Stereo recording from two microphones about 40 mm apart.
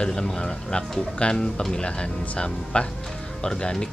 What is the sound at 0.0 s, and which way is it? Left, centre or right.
Speech, centre.